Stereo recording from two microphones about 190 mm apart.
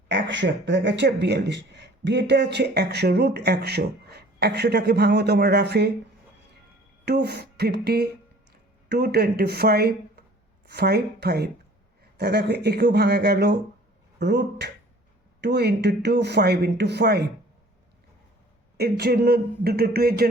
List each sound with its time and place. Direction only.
0.1 s speech: 70° right (ahead or behind)
7.0 s speech: 60° right (ahead or behind)
18.8 s speech: 55° right (ahead or behind)